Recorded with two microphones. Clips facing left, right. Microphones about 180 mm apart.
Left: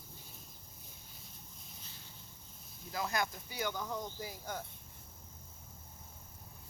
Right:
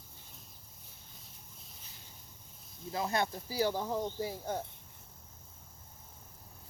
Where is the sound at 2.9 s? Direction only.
30° right (ahead or behind).